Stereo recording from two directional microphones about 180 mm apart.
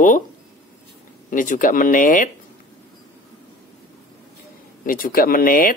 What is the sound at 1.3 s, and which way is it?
Speech, 50° left (ahead or behind).